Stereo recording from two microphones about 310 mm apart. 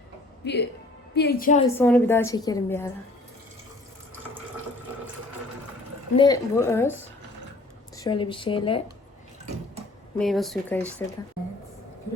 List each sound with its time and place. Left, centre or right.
0.4 s a woman's voice: left
1.8 s a woman's voice: centre
6.1 s a woman's voice: centre
7.9 s a woman's voice: centre
10.2 s speech: centre